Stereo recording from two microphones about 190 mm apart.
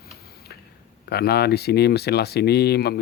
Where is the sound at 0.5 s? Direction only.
60° left (ahead or behind).